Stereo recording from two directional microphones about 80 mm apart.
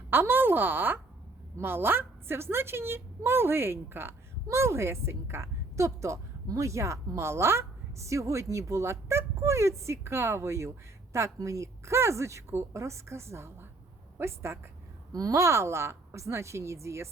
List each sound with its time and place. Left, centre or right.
0.1 s a woman's voice: right
15.1 s a woman's voice: right